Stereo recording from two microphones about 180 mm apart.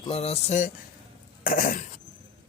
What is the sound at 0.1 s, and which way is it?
Speech, 35° left (ahead or behind).